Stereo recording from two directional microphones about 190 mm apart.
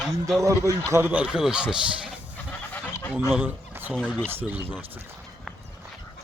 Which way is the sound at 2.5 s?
10° left (ahead or behind).